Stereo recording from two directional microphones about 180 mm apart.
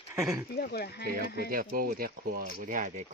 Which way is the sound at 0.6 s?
60° left (ahead or behind).